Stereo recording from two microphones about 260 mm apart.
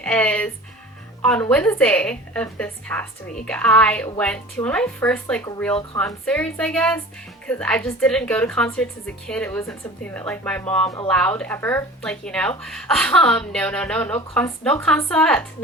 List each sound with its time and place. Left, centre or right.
0.0 s a woman's voice: centre